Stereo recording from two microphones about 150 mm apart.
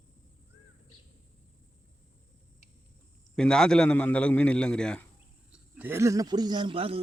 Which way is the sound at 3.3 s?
5° left (ahead or behind).